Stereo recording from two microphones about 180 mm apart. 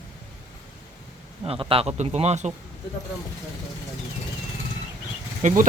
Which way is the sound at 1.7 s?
35° right (ahead or behind).